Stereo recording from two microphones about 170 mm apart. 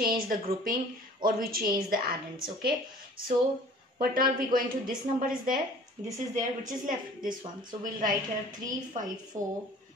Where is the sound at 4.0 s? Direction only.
55° right (ahead or behind).